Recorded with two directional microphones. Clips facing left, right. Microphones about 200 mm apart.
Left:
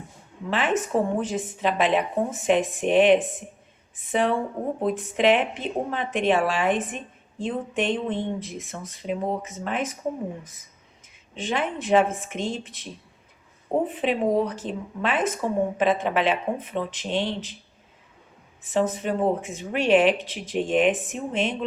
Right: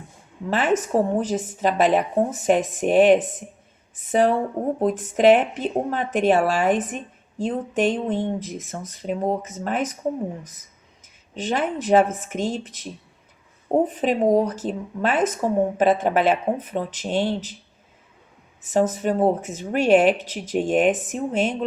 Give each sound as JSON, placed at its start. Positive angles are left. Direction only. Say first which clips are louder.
{"t": 0.5, "sound": "a woman's voice", "louder": "right 3 dB", "side_deg": -40}
{"t": 11.0, "sound": "speech", "louder": "right 3 dB", "side_deg": -40}
{"t": 18.6, "sound": "speech", "louder": "right 3 dB", "side_deg": -45}